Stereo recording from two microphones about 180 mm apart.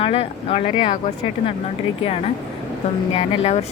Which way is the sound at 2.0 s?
35° left (ahead or behind).